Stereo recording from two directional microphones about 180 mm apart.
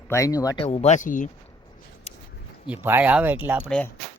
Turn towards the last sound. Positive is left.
turn(degrees=-10)  # may be behind; listen again after turning